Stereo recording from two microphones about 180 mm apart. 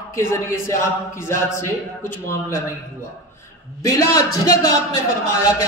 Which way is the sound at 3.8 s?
20° left (ahead or behind).